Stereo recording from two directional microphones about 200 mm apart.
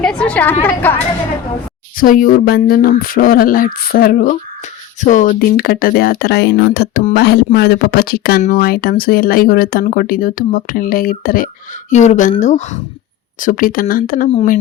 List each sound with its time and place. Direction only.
0.0 s a woman's voice: 5° left (ahead or behind)
2.0 s speech: 45° left (ahead or behind)